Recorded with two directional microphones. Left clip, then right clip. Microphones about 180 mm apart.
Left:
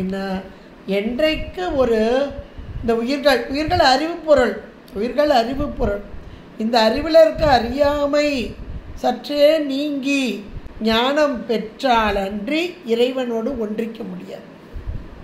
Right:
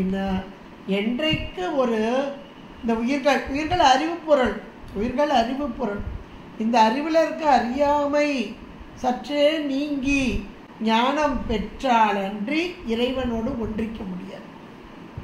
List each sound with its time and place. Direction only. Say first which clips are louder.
0.8 s a woman's voice: left 5 dB; 60° left (ahead or behind)